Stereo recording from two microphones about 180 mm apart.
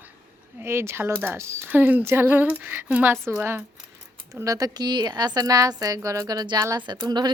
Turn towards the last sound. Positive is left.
turn(degrees=-20)  # may be behind; listen again after turning